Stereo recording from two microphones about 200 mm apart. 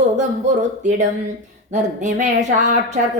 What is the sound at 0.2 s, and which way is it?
Speech, 35° right (ahead or behind).